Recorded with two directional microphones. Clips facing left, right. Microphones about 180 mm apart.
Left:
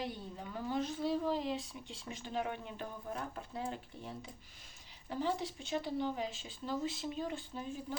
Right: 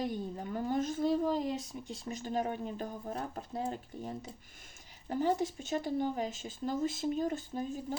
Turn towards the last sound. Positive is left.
turn(degrees=-45)  # may be behind; listen again after turning